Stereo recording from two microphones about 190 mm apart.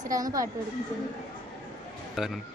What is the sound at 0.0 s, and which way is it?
Speech, 20° right (ahead or behind).